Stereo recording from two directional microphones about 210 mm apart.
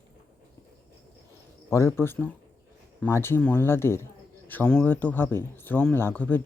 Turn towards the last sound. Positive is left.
turn(degrees=10)  # may be behind; listen again after turning